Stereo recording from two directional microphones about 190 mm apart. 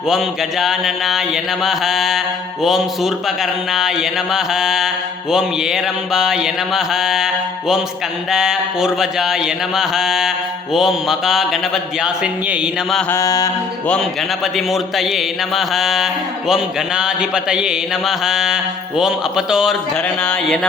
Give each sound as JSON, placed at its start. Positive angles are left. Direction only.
{"t": 0.1, "sound": "mantra", "side_deg": 0}
{"t": 13.1, "sound": "mantra", "side_deg": 15}
{"t": 13.8, "sound": "mantra", "side_deg": 5}